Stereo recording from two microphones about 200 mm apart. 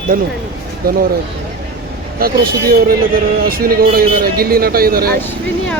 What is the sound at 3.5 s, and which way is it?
A man's voice, 45° right (ahead or behind).